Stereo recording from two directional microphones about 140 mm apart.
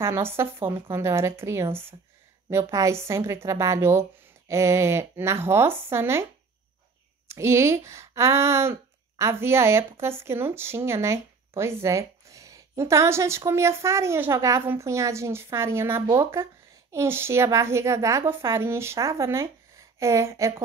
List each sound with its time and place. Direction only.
0.0 s a woman's voice: 15° right (ahead or behind)
7.2 s a woman's voice: 20° right (ahead or behind)